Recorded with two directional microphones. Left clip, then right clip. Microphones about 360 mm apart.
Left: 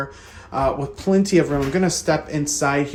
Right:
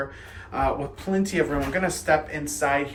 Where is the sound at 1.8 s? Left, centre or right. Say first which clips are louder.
Left 2 dB; centre.